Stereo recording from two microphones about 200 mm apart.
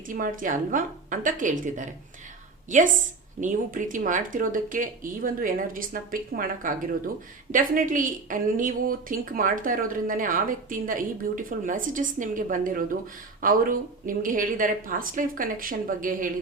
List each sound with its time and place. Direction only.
0.1 s a woman's voice: 45° right (ahead or behind)